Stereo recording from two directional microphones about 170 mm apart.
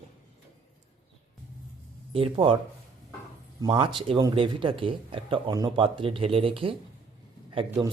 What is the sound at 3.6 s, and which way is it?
Speech, 25° right (ahead or behind).